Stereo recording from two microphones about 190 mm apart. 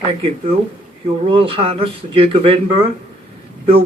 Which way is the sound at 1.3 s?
30° right (ahead or behind).